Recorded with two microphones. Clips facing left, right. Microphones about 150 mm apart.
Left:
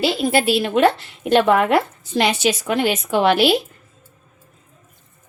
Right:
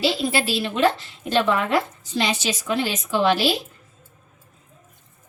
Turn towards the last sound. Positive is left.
turn(degrees=60)  # may be behind; listen again after turning